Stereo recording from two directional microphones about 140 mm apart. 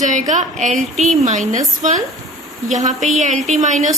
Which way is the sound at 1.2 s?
55° right (ahead or behind).